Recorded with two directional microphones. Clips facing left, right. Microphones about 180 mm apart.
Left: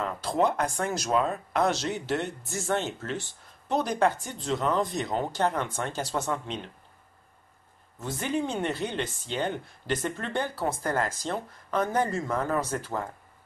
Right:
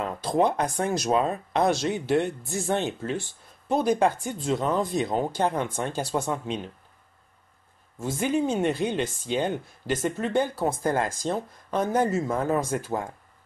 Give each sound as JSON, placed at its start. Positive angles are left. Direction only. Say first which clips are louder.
{"t": 0.0, "sound": "speech", "louder": "right 2 dB", "side_deg": -15}
{"t": 8.0, "sound": "speech", "louder": "right 4 dB", "side_deg": -10}